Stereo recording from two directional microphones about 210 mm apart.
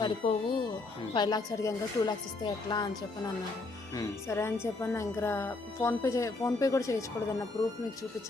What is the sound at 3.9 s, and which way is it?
Speech, 15° left (ahead or behind).